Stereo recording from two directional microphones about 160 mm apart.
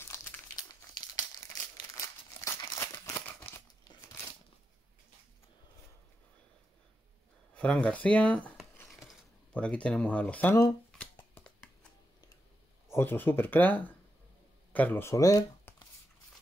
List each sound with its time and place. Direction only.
1.8 s crumpling: 20° left (ahead or behind)
7.5 s speech: 5° left (ahead or behind)
8.8 s a sound: 5° left (ahead or behind)
12.8 s speech: 15° left (ahead or behind)